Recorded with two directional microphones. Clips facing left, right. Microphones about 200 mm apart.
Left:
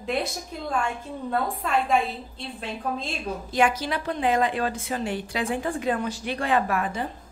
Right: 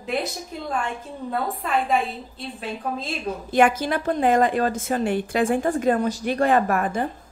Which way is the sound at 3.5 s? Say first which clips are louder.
Right 5 dB; 55° right (ahead or behind).